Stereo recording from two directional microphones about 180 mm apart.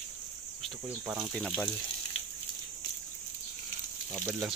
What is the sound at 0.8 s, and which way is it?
Speech, 5° right (ahead or behind).